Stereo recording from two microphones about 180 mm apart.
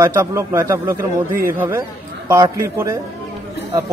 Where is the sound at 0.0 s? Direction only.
15° right (ahead or behind).